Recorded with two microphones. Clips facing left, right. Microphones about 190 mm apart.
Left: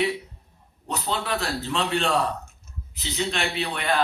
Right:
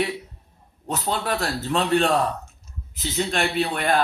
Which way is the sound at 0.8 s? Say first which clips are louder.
Right 3 dB; 45° right (ahead or behind).